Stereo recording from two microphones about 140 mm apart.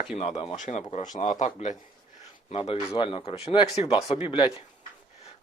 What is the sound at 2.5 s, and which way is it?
Speech, 45° left (ahead or behind).